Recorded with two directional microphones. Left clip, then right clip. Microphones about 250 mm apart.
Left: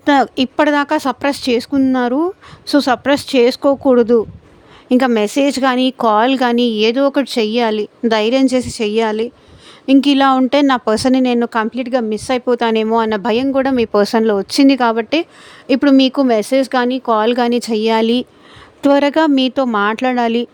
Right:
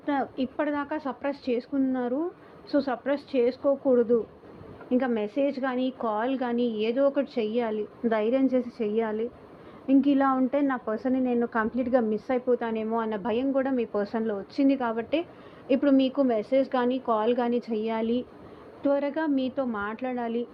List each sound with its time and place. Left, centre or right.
0.0 s a woman's voice: left
12.5 s speech: left